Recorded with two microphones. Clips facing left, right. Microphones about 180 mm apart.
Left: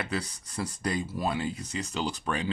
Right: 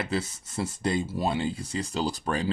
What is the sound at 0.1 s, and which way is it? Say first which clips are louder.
Speech: right 3 dB; 25° right (ahead or behind).